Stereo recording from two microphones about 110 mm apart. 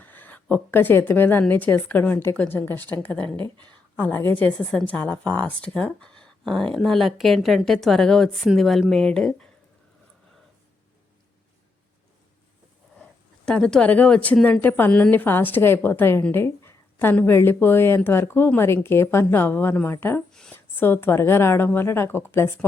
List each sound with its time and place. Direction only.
0.0 s a woman's voice: 15° left (ahead or behind)
13.4 s a woman's voice: 5° left (ahead or behind)
20.3 s a woman's voice: 5° left (ahead or behind)
20.7 s speech: 20° left (ahead or behind)